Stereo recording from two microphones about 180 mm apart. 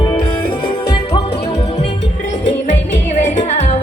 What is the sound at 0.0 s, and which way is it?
Music, 25° left (ahead or behind).